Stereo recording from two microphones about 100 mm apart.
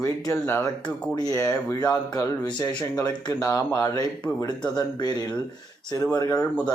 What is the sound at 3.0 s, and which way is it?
Speech, 35° left (ahead or behind).